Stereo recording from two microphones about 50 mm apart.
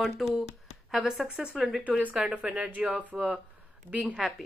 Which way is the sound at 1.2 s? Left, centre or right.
Right.